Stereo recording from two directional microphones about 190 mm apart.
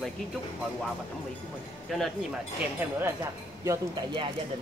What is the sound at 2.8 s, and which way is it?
Speech, 10° right (ahead or behind).